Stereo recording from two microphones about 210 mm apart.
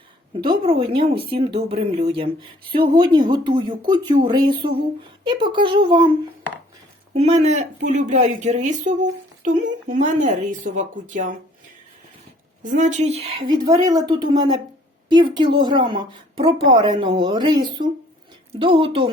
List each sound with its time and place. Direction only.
0.4 s a woman's voice: 25° right (ahead or behind)
7.1 s speech: 30° right (ahead or behind)
12.6 s a woman's voice: 35° right (ahead or behind)